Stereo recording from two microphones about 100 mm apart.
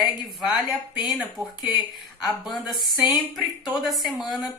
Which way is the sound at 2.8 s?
45° left (ahead or behind).